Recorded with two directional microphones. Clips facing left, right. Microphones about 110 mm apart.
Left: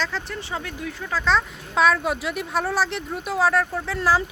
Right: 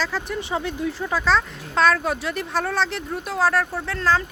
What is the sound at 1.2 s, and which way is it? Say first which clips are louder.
A woman's voice: left 1 dB; centre (ahead or behind).